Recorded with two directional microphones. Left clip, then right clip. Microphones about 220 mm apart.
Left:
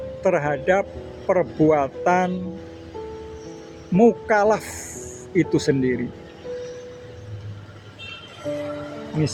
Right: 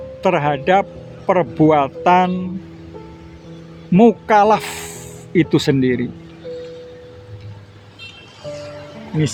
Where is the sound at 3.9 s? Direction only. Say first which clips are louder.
Right 5 dB; 30° right (ahead or behind).